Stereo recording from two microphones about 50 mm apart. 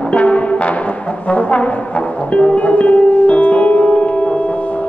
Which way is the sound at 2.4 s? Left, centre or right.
Left.